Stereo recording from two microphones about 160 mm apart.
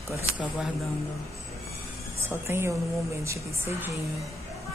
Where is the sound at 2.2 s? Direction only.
15° right (ahead or behind).